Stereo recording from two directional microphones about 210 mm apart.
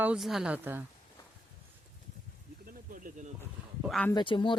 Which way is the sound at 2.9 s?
40° right (ahead or behind).